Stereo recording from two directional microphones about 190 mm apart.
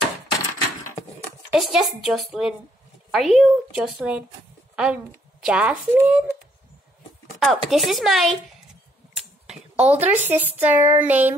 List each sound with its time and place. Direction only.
1.5 s a woman's voice: centre (ahead or behind)
7.3 s a woman's voice: centre (ahead or behind)
9.8 s a woman's voice: 35° right (ahead or behind)
10.0 s speech: 10° right (ahead or behind)